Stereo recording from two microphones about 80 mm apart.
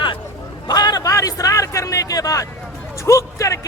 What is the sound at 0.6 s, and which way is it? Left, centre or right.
A man's voice, left.